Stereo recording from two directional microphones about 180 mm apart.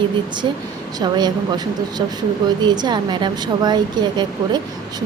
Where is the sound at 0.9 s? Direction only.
25° right (ahead or behind).